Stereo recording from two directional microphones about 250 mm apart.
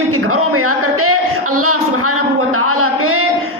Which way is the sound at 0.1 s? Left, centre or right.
Right.